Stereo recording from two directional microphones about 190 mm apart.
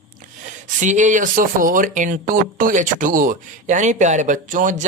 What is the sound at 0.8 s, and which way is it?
Speech, 40° right (ahead or behind).